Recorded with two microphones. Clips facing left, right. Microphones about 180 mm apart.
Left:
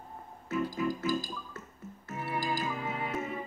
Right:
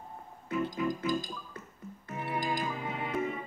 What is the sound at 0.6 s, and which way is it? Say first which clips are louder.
Music: even; 20° right (ahead or behind).